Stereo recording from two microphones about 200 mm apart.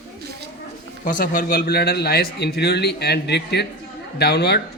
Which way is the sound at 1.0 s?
40° left (ahead or behind).